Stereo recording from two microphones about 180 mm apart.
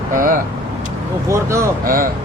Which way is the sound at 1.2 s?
15° right (ahead or behind).